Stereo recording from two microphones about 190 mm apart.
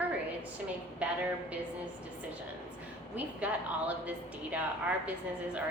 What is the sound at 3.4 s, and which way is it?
A woman's voice, 5° right (ahead or behind).